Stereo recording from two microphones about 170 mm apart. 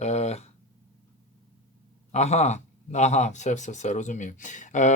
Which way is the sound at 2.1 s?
40° left (ahead or behind).